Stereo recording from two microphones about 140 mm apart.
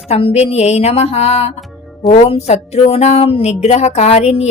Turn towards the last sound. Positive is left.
turn(degrees=50)  # may be behind; listen again after turning